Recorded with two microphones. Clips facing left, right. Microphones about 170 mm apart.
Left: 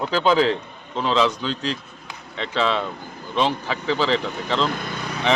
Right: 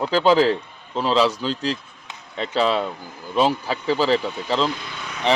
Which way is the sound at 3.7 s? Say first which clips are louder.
Right 2 dB; 40° right (ahead or behind).